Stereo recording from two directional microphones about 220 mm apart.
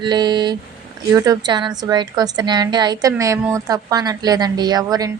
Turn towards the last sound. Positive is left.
turn(degrees=-15)  # may be behind; listen again after turning